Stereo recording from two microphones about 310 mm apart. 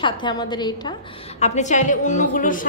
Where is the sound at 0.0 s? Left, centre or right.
Centre.